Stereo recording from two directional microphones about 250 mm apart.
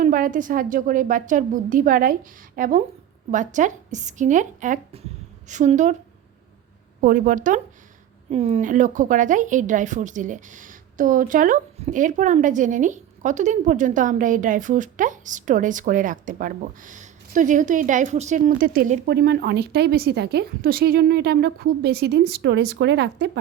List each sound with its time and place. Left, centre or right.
0.0 s a woman's voice: right
7.0 s a woman's voice: right